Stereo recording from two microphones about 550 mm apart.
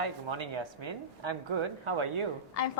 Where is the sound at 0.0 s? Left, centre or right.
Right.